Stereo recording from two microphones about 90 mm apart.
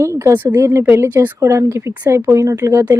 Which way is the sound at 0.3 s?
20° right (ahead or behind).